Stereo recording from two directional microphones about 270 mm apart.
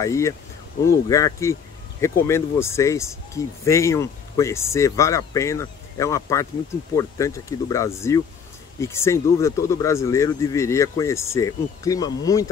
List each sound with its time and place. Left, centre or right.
0.0 s speech: centre